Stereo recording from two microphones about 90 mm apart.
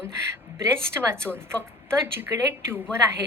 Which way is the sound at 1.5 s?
15° left (ahead or behind).